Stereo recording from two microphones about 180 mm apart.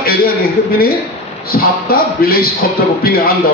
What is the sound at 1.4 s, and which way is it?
Speech, 55° left (ahead or behind).